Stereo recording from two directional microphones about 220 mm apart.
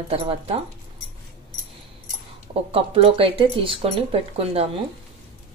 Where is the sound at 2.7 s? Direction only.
25° right (ahead or behind).